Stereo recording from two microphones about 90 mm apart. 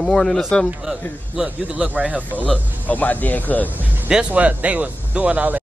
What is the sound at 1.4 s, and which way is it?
Speech, 15° right (ahead or behind).